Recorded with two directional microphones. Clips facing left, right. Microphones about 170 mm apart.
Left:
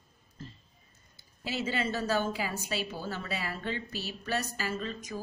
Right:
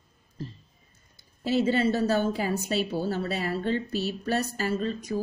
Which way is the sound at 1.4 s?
40° right (ahead or behind).